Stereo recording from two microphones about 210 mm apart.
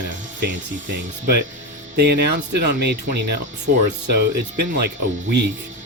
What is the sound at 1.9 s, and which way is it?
Speech, 50° right (ahead or behind).